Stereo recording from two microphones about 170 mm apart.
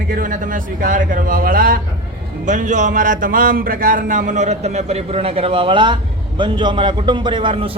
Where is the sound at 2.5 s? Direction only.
45° right (ahead or behind); by 6.0 s 30° right (ahead or behind).